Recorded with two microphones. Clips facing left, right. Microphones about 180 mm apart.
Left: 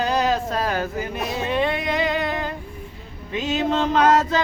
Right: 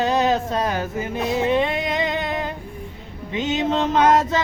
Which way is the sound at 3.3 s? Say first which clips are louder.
Right 1 dB; 20° right (ahead or behind).